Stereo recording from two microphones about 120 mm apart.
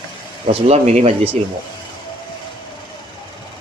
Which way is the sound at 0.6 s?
65° right (ahead or behind).